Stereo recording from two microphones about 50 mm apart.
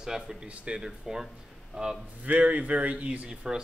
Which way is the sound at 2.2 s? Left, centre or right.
Right.